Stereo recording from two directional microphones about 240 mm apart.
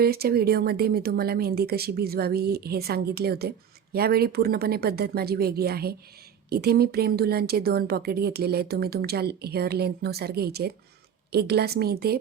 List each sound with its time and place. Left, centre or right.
0.0 s a woman's voice: right